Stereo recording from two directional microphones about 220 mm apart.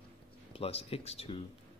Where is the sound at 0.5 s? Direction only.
25° left (ahead or behind).